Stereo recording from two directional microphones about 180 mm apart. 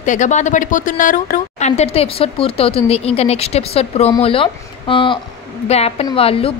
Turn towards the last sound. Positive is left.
turn(degrees=30)  # may be behind; listen again after turning